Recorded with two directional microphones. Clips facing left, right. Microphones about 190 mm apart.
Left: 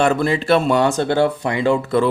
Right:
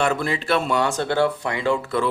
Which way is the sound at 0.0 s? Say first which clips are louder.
Left 5 dB; 30° left (ahead or behind).